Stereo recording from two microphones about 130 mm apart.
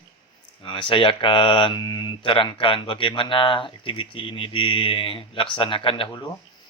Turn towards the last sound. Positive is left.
turn(degrees=40)  # may be behind; listen again after turning